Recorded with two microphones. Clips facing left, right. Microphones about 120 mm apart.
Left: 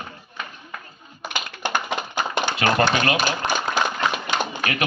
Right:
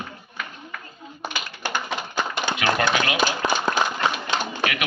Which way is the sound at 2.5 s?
35° left (ahead or behind).